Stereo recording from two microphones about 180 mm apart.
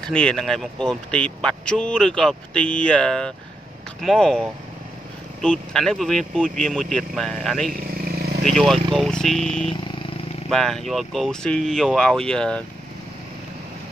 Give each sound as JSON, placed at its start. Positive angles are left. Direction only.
{"t": 0.0, "sound": "speech", "side_deg": 5}
{"t": 7.7, "sound": "vehicle", "side_deg": -55}
{"t": 8.5, "sound": "speech", "side_deg": 5}
{"t": 9.7, "sound": "vehicle", "side_deg": 30}
{"t": 10.5, "sound": "speech", "side_deg": 0}